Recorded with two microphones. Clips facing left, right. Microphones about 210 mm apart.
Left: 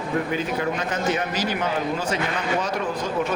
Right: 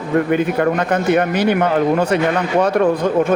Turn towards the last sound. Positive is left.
turn(degrees=-55)  # may be behind; listen again after turning